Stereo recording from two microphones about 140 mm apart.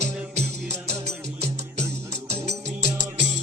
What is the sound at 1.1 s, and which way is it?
Music, 45° right (ahead or behind).